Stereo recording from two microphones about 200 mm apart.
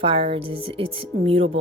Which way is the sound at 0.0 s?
25° right (ahead or behind).